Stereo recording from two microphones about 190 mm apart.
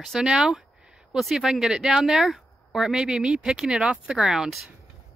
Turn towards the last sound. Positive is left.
turn(degrees=-5)  # may be behind; listen again after turning